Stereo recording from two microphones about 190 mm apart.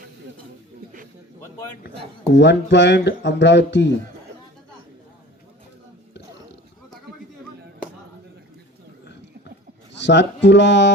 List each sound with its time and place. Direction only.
2.3 s speech: 70° left (ahead or behind)
10.0 s speech: 70° left (ahead or behind)